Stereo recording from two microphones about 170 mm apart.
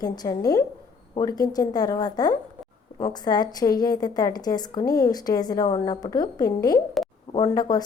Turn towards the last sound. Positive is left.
turn(degrees=25)  # may be behind; listen again after turning